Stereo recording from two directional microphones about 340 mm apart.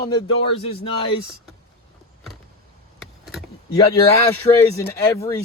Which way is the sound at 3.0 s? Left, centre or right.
Centre.